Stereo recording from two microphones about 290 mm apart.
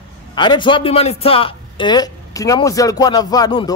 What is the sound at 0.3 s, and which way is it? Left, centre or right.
A man's voice, centre.